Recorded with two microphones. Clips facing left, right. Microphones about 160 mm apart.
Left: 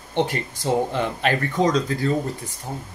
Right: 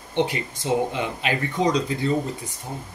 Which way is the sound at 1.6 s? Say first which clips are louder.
Left 1 dB; 20° right (ahead or behind).